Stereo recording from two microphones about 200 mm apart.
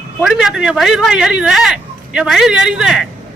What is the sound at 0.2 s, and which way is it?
Speech, centre (ahead or behind).